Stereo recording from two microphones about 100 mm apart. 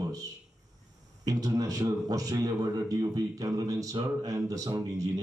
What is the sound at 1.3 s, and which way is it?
A man's voice, 35° right (ahead or behind).